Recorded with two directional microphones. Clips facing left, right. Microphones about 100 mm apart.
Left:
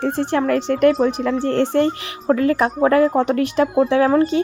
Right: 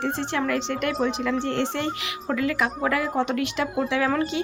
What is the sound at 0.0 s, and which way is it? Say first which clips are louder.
A woman's voice: left 7 dB; 45° left (ahead or behind).